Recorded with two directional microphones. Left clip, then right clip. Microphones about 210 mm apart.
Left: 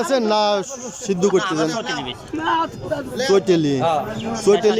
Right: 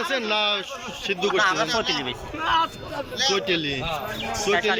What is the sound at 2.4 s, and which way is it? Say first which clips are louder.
Speech: left 2 dB; 55° left (ahead or behind).